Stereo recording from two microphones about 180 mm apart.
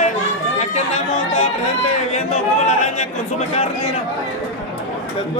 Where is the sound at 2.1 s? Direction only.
40° left (ahead or behind).